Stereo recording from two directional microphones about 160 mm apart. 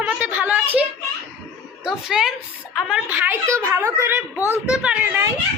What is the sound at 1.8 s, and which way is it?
A woman's voice, 5° right (ahead or behind).